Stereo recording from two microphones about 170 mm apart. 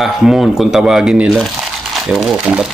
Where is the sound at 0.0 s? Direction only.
Centre (ahead or behind).